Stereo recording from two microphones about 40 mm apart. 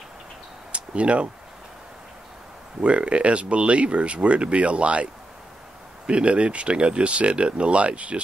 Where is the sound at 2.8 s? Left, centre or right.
Right.